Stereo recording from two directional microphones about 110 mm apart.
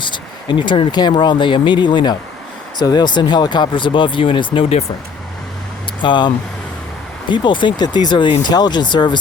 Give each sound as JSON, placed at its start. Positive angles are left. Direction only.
{"t": 0.0, "sound": "speech", "side_deg": 45}
{"t": 6.0, "sound": "speech", "side_deg": 45}